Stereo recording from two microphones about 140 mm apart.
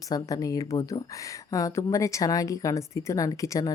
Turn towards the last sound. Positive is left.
turn(degrees=25)  # may be behind; listen again after turning